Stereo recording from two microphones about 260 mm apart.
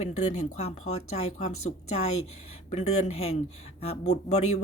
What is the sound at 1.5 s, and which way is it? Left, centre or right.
Speech, left.